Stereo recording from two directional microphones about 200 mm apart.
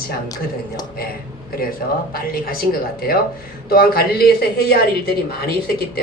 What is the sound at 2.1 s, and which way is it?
Speech, 45° left (ahead or behind).